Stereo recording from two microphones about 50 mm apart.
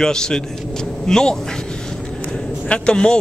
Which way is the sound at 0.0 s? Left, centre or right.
Centre.